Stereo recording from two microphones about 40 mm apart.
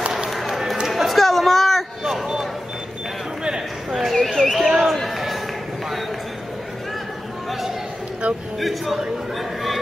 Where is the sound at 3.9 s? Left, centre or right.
Centre.